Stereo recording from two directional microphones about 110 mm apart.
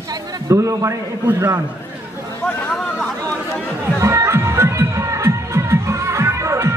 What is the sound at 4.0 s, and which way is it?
Music, 25° right (ahead or behind).